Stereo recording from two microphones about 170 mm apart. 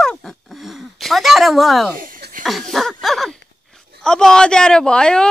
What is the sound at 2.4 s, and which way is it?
Speech, centre (ahead or behind).